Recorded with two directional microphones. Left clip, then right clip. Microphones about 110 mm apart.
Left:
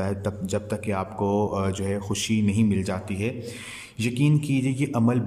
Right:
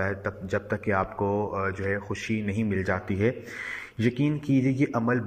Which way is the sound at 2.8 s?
5° left (ahead or behind).